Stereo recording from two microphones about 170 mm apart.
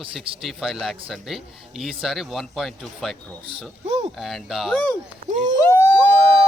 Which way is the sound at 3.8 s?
40° right (ahead or behind).